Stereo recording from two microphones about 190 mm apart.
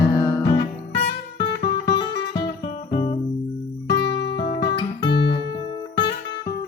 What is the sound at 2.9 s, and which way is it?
Music, 30° left (ahead or behind).